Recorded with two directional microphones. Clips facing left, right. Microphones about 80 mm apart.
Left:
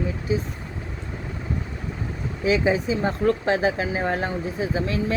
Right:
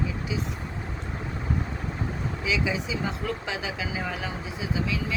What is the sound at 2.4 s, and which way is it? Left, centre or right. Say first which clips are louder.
Speech: left 8 dB; left.